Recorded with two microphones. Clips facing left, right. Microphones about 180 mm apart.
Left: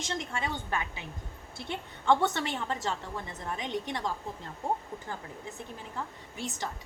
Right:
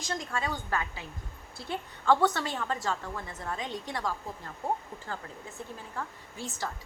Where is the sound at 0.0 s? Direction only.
25° left (ahead or behind).